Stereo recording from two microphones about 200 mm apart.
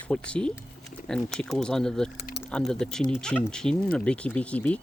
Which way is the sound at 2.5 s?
5° left (ahead or behind).